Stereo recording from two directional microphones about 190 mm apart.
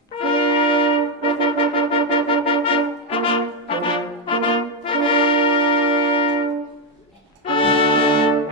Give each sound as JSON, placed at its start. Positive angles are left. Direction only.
{"t": 0.2, "sound": "brass instrument", "side_deg": 25}
{"t": 7.4, "sound": "brass instrument", "side_deg": 25}